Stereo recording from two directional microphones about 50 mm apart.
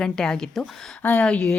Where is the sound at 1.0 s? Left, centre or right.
Left.